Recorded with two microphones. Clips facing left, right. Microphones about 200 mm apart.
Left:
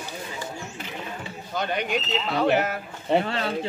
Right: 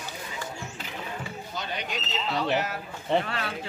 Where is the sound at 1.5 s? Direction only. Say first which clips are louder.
Left 9 dB; 55° left (ahead or behind).